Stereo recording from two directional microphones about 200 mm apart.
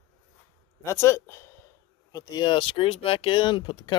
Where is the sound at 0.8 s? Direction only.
15° left (ahead or behind).